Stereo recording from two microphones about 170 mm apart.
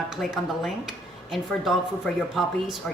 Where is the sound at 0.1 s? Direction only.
Centre (ahead or behind).